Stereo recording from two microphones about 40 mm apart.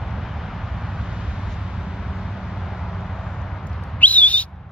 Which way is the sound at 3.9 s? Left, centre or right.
Left.